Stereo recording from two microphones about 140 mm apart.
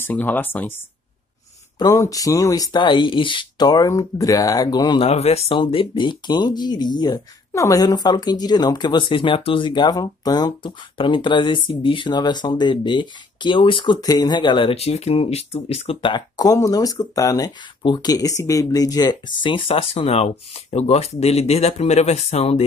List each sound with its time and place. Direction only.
0.0 s speech: 10° left (ahead or behind)
1.8 s speech: 25° left (ahead or behind)
5.0 s speech: 50° left (ahead or behind)